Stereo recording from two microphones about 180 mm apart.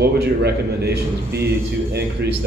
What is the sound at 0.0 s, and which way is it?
A man's voice, 65° right (ahead or behind).